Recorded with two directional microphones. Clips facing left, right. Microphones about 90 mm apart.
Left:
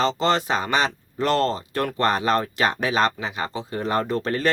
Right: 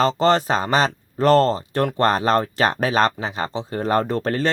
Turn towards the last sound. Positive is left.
turn(degrees=-35)  # may be behind; listen again after turning